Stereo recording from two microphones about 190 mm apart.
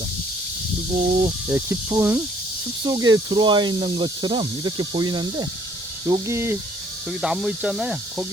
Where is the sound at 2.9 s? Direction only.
20° right (ahead or behind).